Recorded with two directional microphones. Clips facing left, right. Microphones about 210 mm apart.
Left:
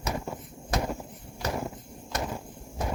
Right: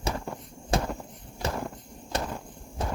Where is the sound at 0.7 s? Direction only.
30° right (ahead or behind).